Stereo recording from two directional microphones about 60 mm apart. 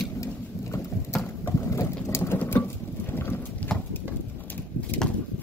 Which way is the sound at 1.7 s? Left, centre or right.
Left.